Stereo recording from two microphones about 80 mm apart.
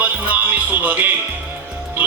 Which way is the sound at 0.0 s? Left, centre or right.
Centre.